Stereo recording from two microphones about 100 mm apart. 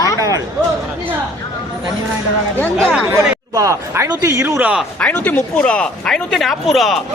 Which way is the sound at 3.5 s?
30° right (ahead or behind).